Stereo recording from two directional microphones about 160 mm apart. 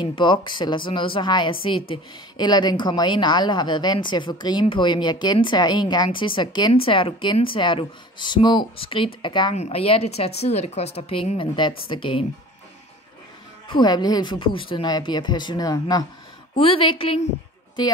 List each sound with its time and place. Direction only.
0.0 s a woman's voice: 30° left (ahead or behind)
13.7 s a woman's voice: 25° left (ahead or behind)